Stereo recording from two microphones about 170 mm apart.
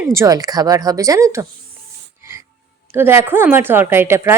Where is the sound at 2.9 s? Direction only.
15° right (ahead or behind).